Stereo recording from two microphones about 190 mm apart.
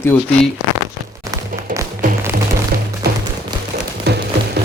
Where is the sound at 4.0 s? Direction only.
60° right (ahead or behind).